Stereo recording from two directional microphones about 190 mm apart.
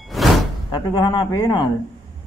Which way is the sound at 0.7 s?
20° left (ahead or behind).